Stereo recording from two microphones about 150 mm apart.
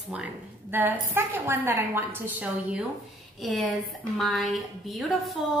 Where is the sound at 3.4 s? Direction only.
Centre (ahead or behind).